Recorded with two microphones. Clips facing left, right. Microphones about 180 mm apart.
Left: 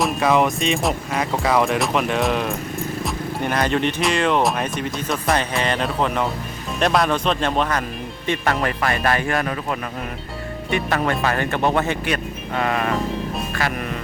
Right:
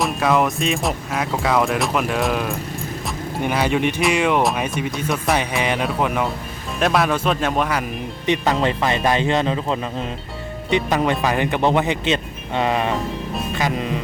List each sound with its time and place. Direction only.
0.0 s speech: centre (ahead or behind)
8.3 s speech: 20° right (ahead or behind)